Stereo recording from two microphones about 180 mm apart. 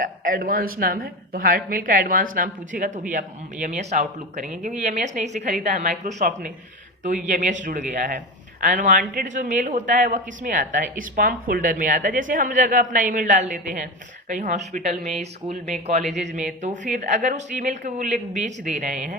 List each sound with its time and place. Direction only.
0.0 s speech: 50° right (ahead or behind)